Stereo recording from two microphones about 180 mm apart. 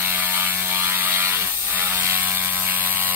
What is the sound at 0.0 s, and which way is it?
Ratchet, 10° right (ahead or behind).